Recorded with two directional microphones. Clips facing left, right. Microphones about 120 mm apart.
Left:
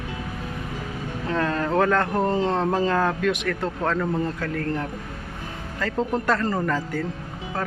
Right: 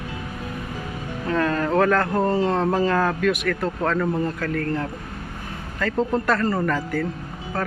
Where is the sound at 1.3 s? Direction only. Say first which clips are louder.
Right 2 dB; 20° left (ahead or behind).